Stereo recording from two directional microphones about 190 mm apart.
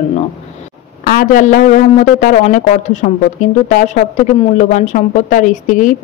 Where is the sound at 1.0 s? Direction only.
45° left (ahead or behind).